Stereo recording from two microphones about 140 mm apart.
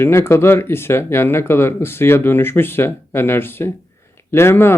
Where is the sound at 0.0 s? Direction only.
15° left (ahead or behind).